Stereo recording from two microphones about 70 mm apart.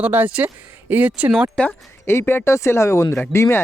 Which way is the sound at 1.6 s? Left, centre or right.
Centre.